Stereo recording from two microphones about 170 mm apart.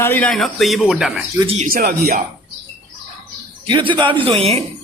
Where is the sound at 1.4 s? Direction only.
35° right (ahead or behind).